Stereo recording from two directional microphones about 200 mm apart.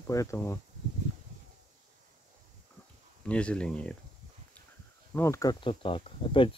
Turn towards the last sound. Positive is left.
turn(degrees=25)  # may be behind; listen again after turning